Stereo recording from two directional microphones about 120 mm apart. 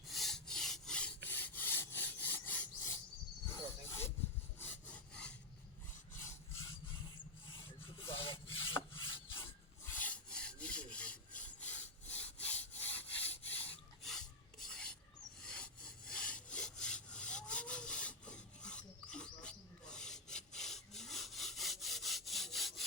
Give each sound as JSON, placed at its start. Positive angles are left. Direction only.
{"t": 0.1, "sound": "rub", "side_deg": 0}
{"t": 4.6, "sound": "wood", "side_deg": 10}
{"t": 6.2, "sound": "rub", "side_deg": 25}
{"t": 8.1, "sound": "rub", "side_deg": 45}
{"t": 9.3, "sound": "rub", "side_deg": 20}
{"t": 14.0, "sound": "filing", "side_deg": 5}
{"t": 15.4, "sound": "wood", "side_deg": 10}